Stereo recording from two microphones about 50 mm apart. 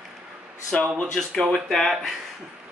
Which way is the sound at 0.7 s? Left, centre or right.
Centre.